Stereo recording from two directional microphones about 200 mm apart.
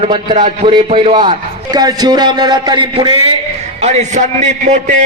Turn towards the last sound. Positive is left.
turn(degrees=-35)  # may be behind; listen again after turning